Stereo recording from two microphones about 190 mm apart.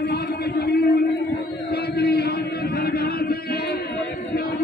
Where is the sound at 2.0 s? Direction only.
55° left (ahead or behind).